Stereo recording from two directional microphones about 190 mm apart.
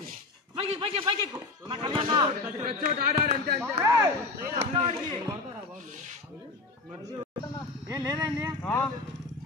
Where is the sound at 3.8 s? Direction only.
15° right (ahead or behind).